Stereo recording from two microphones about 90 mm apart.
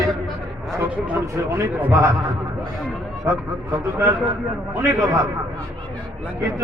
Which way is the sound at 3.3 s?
30° right (ahead or behind).